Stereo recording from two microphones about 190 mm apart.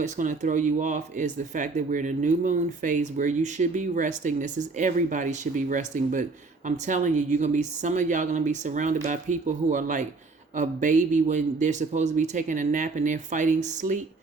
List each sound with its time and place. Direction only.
0.0 s speech: 40° right (ahead or behind)